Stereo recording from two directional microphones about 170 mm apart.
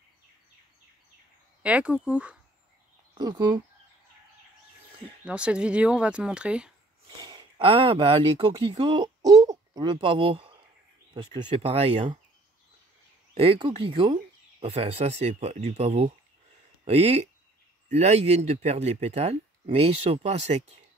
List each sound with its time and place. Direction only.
1.6 s speech: 10° right (ahead or behind)
3.2 s speech: 25° right (ahead or behind)
5.2 s speech: 5° right (ahead or behind)
7.2 s speech: 25° right (ahead or behind)
13.4 s speech: 35° right (ahead or behind)